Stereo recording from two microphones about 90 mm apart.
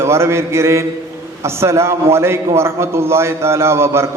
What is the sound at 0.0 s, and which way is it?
A man's voice, 30° right (ahead or behind).